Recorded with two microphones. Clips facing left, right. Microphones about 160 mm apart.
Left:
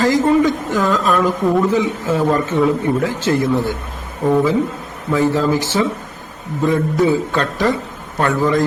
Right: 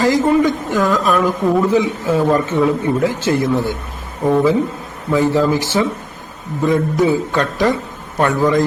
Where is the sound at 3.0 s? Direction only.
15° right (ahead or behind).